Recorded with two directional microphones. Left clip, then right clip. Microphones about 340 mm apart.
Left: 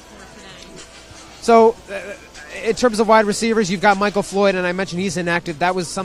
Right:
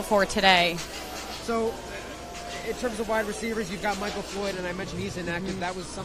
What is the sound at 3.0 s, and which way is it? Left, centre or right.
Speech, left.